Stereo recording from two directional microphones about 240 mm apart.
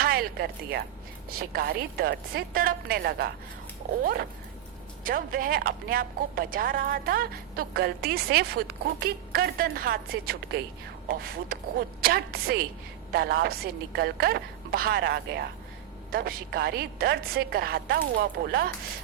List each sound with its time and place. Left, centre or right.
0.0 s a woman's voice: right